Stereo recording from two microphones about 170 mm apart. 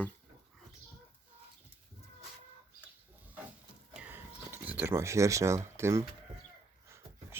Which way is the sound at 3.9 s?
10° right (ahead or behind).